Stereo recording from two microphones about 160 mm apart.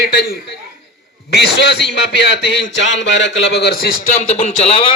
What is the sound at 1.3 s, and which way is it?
A man's voice, 90° left.